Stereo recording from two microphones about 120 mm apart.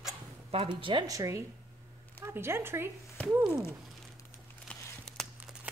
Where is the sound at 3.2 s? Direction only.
10° left (ahead or behind).